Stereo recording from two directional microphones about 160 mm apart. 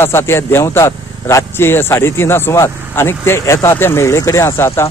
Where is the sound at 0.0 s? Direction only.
15° left (ahead or behind).